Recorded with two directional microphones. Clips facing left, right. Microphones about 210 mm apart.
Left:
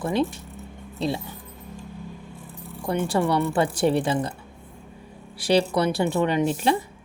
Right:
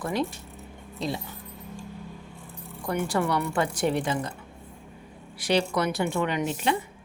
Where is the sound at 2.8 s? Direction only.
30° left (ahead or behind).